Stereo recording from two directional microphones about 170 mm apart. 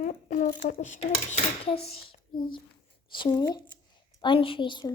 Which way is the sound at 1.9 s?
35° left (ahead or behind).